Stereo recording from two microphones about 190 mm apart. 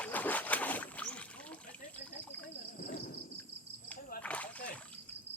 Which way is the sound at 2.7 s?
45° left (ahead or behind).